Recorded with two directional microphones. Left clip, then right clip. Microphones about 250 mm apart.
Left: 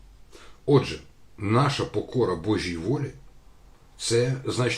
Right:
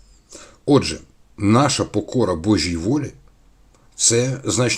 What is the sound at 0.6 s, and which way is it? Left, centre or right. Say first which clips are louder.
Speech: right 5 dB; right.